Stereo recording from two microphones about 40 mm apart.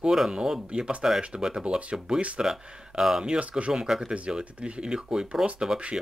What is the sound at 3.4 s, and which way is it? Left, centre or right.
Speech, right.